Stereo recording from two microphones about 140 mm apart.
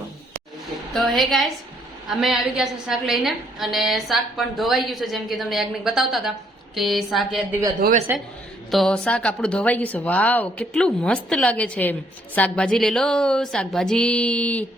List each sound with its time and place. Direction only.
0.9 s a woman's voice: centre (ahead or behind)
7.8 s speech: 75° right (ahead or behind)
8.7 s speech: 5° left (ahead or behind)